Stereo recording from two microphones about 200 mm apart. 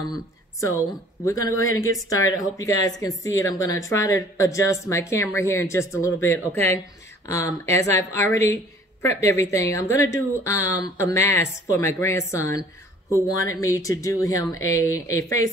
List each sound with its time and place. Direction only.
0.6 s a woman's voice: 15° left (ahead or behind)